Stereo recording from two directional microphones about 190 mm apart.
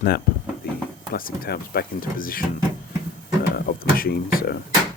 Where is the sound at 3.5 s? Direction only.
50° left (ahead or behind).